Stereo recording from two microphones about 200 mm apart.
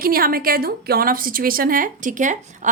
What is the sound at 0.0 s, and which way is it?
A woman's voice, 45° right (ahead or behind).